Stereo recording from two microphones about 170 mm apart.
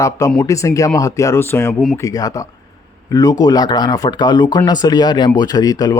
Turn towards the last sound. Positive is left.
turn(degrees=20)  # may be behind; listen again after turning